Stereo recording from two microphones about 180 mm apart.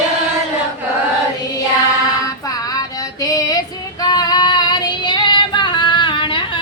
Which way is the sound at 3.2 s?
20° left (ahead or behind).